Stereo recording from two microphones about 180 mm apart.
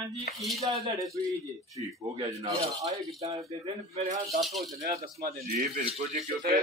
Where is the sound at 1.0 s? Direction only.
20° right (ahead or behind).